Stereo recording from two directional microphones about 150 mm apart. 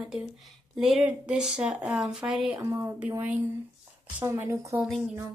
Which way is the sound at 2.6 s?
25° right (ahead or behind).